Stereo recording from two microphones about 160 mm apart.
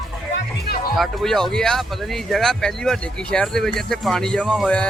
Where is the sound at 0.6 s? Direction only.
75° left (ahead or behind).